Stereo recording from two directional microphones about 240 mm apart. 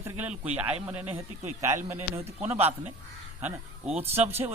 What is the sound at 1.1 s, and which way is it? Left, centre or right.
Speech, right.